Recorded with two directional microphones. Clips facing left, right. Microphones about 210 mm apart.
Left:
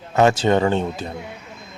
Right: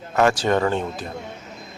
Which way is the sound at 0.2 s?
25° left (ahead or behind).